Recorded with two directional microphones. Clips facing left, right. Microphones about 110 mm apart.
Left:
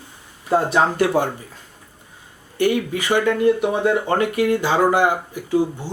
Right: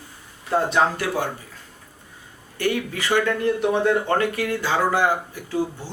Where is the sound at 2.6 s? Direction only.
15° left (ahead or behind).